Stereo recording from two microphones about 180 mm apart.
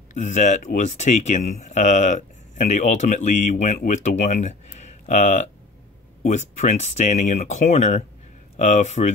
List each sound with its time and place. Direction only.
0.1 s speech: 40° left (ahead or behind)